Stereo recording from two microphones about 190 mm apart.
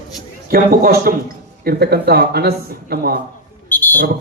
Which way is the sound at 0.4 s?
50° right (ahead or behind).